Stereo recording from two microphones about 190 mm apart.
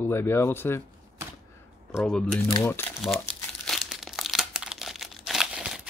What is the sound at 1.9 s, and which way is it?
Speech, centre (ahead or behind).